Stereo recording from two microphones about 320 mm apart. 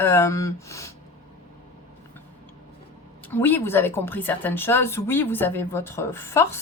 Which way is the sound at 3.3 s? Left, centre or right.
Centre.